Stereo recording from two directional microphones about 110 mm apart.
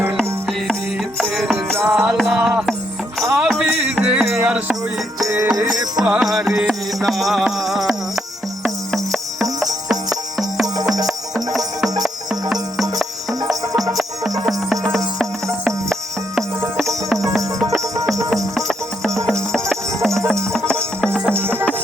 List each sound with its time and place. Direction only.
1.2 s music: centre (ahead or behind)
5.2 s music: 30° right (ahead or behind)
6.0 s music: 10° right (ahead or behind)
11.0 s music: centre (ahead or behind)
15.6 s music: centre (ahead or behind)
19.3 s music: 5° left (ahead or behind)